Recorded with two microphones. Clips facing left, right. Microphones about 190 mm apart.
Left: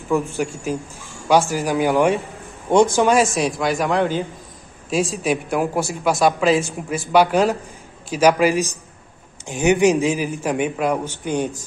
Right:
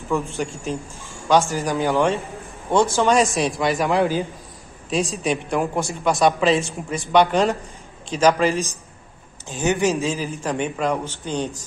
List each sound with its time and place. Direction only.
0.2 s speech: centre (ahead or behind)
0.7 s a man's voice: 15° left (ahead or behind)
3.1 s a man's voice: centre (ahead or behind)